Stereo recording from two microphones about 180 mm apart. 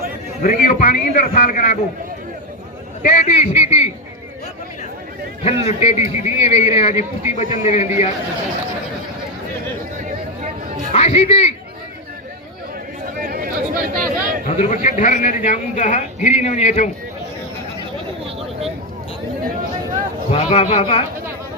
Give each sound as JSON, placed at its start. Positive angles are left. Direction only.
{"t": 0.4, "sound": "a man's voice", "side_deg": 50}
{"t": 3.0, "sound": "speech", "side_deg": 40}
{"t": 5.4, "sound": "speech", "side_deg": 35}
{"t": 10.9, "sound": "speech", "side_deg": 35}
{"t": 13.2, "sound": "a sound", "side_deg": -55}
{"t": 14.5, "sound": "a man's voice", "side_deg": 40}
{"t": 20.3, "sound": "speech", "side_deg": 35}